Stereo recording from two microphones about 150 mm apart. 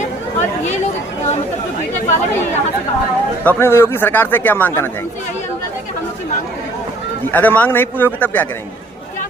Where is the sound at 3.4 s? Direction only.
15° left (ahead or behind).